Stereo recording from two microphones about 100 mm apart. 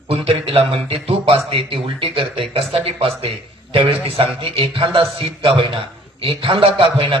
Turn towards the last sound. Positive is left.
turn(degrees=-60)  # may be behind; listen again after turning